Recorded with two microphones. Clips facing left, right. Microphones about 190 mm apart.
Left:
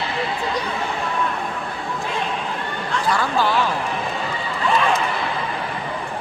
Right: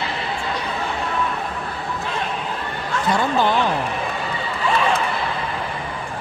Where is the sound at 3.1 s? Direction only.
20° right (ahead or behind).